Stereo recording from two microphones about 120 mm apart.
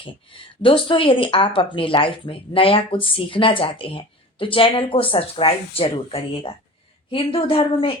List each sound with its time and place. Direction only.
0.0 s speech: 45° left (ahead or behind)